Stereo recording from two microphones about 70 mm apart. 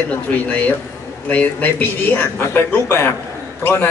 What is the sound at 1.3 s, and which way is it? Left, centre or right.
Speech, left.